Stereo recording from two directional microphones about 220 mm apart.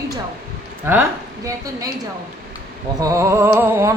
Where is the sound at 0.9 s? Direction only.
10° right (ahead or behind).